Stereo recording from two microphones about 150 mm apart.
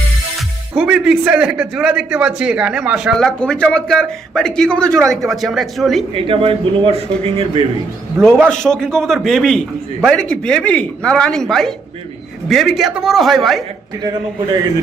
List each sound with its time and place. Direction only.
0.7 s a man's voice: 5° right (ahead or behind)
6.1 s a man's voice: 35° right (ahead or behind)
8.2 s a man's voice: 5° left (ahead or behind)